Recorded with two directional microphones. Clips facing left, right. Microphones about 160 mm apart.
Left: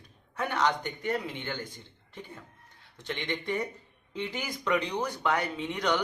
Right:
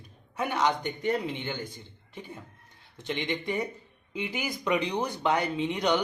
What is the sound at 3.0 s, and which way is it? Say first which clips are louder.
A man's voice: right 3 dB; 15° right (ahead or behind).